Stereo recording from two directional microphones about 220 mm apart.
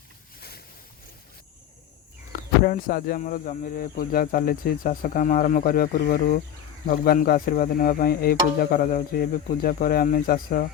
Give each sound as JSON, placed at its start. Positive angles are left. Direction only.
{"t": 2.3, "sound": "speech", "side_deg": 40}